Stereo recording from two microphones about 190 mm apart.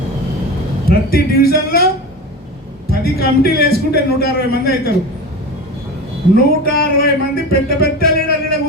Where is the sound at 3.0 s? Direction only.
55° left (ahead or behind).